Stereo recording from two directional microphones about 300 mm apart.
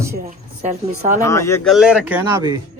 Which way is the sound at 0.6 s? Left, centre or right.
Right.